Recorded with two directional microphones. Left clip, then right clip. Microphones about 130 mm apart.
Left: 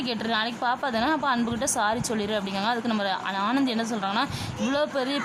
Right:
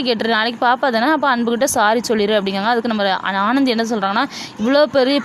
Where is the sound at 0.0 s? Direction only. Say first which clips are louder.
Right 10 dB; 45° right (ahead or behind).